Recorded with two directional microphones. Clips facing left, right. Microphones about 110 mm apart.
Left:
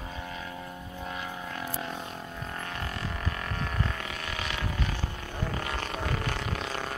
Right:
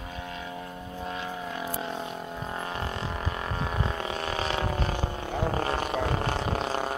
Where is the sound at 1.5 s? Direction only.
20° right (ahead or behind); by 4.9 s 35° right (ahead or behind).